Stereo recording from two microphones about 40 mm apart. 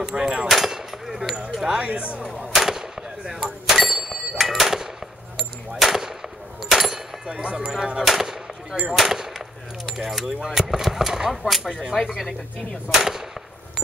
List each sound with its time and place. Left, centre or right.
0.0 s keys jangling: centre
0.5 s a sound: centre
1.7 s speech: right
2.3 s a sound: centre
5.8 s gunshot: centre
6.7 s a sound: centre
7.2 s speech: right
8.0 s gunshot: centre
8.9 s speech: centre
12.0 s gunshot: centre
12.9 s speech: centre